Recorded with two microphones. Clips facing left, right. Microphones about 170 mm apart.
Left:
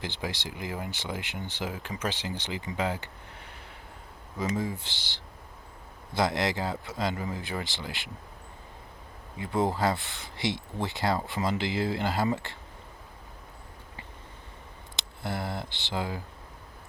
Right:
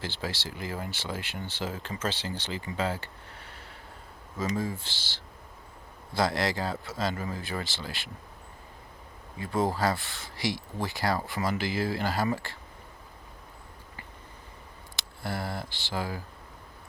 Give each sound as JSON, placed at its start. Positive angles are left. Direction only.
{"t": 0.0, "sound": "a man's voice", "side_deg": 15}
{"t": 9.4, "sound": "a man's voice", "side_deg": 20}
{"t": 14.9, "sound": "speech", "side_deg": 20}